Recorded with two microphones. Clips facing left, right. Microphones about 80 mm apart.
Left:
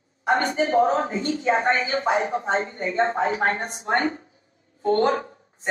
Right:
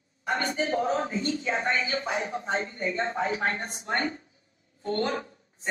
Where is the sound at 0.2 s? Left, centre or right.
Left.